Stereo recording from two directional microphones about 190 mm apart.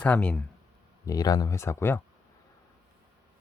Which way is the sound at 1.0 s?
20° left (ahead or behind).